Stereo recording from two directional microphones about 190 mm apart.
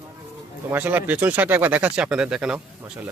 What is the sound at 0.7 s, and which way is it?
Speech, 10° right (ahead or behind).